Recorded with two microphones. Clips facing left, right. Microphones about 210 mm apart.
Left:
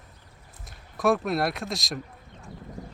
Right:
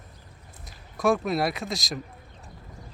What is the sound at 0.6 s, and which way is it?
Speech, centre (ahead or behind).